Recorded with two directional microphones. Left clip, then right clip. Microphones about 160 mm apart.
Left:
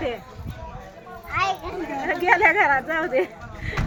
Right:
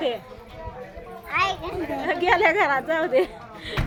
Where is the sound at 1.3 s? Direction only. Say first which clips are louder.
Even; 45° right (ahead or behind).